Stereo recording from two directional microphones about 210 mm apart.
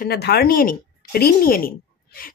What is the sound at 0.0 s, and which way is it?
Speech, 50° left (ahead or behind).